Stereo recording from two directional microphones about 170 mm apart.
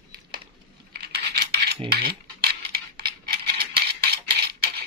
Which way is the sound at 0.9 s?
70° right (ahead or behind).